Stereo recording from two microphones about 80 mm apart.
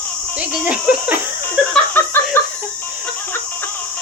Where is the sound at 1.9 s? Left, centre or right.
Left.